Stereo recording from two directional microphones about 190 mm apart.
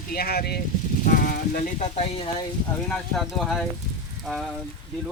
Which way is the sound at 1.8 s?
30° left (ahead or behind).